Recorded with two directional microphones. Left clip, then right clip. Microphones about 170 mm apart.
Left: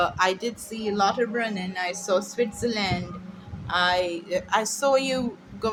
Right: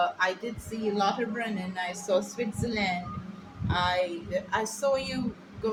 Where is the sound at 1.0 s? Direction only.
55° left (ahead or behind).